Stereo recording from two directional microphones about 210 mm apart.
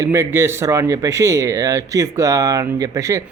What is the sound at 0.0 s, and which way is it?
A man's voice, 15° right (ahead or behind).